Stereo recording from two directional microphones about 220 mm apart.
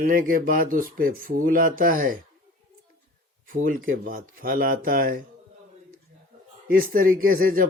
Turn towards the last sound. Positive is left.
turn(degrees=-40)  # may be behind; listen again after turning